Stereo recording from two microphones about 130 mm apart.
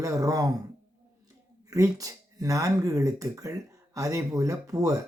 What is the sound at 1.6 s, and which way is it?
Speech, 25° right (ahead or behind).